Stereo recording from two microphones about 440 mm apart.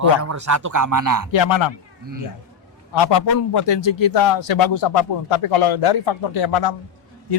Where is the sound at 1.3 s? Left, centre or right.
Left.